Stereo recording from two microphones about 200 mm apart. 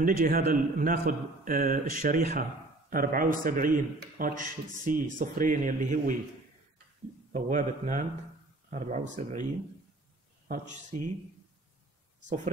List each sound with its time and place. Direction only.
0.0 s a man's voice: 45° right (ahead or behind)
7.3 s speech: 40° right (ahead or behind)
10.5 s speech: 35° right (ahead or behind)